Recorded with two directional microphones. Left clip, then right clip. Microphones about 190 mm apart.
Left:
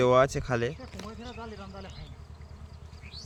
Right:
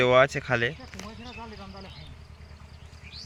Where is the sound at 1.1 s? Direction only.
40° right (ahead or behind).